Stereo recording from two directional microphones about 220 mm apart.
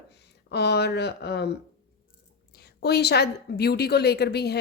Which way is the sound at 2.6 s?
45° left (ahead or behind).